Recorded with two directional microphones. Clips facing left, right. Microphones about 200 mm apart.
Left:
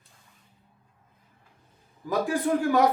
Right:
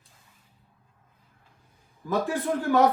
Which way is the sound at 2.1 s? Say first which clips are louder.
Left 2 dB; 15° left (ahead or behind).